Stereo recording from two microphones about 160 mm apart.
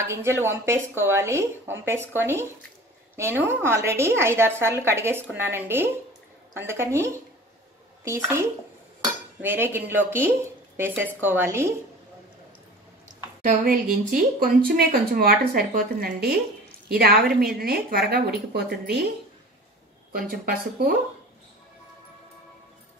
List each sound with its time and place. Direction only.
0.0 s a woman's voice: 15° right (ahead or behind)
9.0 s dishes: 15° right (ahead or behind)
10.8 s a woman's voice: 15° right (ahead or behind)
13.4 s a woman's voice: 55° right (ahead or behind); by 19.0 s 90° right